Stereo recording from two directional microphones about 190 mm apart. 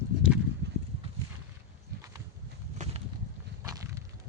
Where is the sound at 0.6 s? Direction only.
60° right (ahead or behind).